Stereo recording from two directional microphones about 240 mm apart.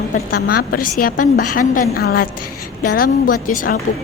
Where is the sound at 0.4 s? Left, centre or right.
Left.